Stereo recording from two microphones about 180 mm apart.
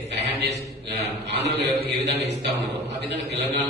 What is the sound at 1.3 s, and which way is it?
Speech, 70° right (ahead or behind).